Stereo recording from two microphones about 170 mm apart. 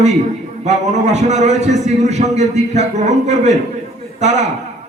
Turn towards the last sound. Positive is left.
turn(degrees=-45)  # may be behind; listen again after turning